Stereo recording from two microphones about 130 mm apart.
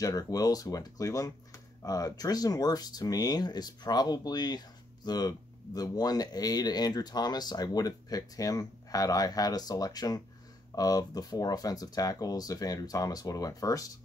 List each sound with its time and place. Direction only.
0.0 s speech: 30° left (ahead or behind)